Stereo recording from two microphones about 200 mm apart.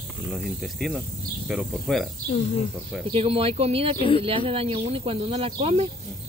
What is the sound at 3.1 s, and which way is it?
Speech, 30° right (ahead or behind).